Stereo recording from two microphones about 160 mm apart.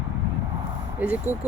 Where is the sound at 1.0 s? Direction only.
10° right (ahead or behind).